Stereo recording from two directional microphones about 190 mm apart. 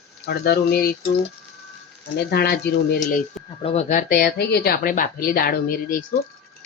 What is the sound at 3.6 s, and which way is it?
Speech, 35° left (ahead or behind).